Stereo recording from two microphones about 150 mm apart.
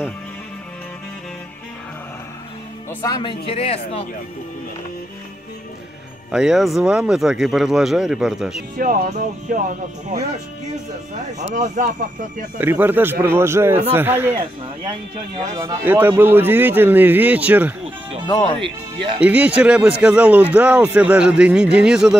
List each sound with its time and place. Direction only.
2.9 s speech: 15° left (ahead or behind)
3.2 s speech: 35° left (ahead or behind)
6.3 s speech: 5° right (ahead or behind)
8.7 s speech: 65° right (ahead or behind)
11.3 s speech: 50° right (ahead or behind)
12.5 s speech: 10° right (ahead or behind)
15.6 s speech: 15° right (ahead or behind)
19.1 s speech: 10° right (ahead or behind)